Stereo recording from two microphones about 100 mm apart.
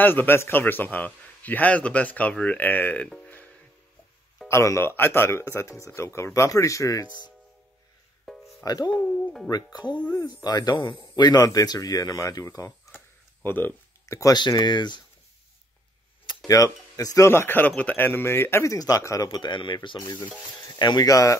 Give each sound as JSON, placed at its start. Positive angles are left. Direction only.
{"t": 0.0, "sound": "a man's voice", "side_deg": 20}
{"t": 4.5, "sound": "speech", "side_deg": 25}
{"t": 8.3, "sound": "music", "side_deg": 0}
{"t": 8.6, "sound": "speech", "side_deg": 40}
{"t": 12.9, "sound": "a sound", "side_deg": 20}
{"t": 14.3, "sound": "speech", "side_deg": 45}
{"t": 16.4, "sound": "speech", "side_deg": 35}
{"t": 17.3, "sound": "speech", "side_deg": 20}
{"t": 19.3, "sound": "speech", "side_deg": 50}
{"t": 20.0, "sound": "speech", "side_deg": 40}
{"t": 21.1, "sound": "speech", "side_deg": 35}